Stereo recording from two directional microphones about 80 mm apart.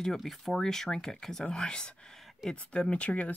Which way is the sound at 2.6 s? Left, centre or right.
Centre.